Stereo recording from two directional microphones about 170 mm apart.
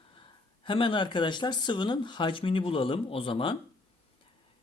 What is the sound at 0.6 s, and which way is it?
Speech, 30° left (ahead or behind).